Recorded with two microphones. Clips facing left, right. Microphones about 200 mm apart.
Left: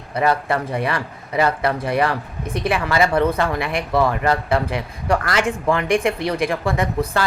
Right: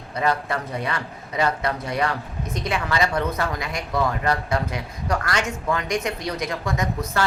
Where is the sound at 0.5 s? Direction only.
55° left (ahead or behind).